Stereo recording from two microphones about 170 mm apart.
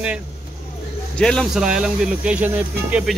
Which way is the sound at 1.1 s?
5° left (ahead or behind).